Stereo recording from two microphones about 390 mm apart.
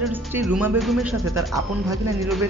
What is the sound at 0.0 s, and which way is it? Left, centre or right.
Speech, centre.